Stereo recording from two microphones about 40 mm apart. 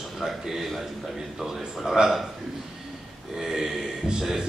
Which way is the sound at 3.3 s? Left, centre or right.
Centre.